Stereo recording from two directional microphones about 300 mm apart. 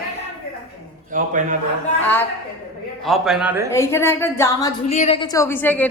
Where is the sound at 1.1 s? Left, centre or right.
Right.